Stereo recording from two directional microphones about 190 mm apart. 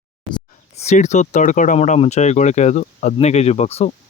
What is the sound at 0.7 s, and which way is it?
Speech, 35° left (ahead or behind).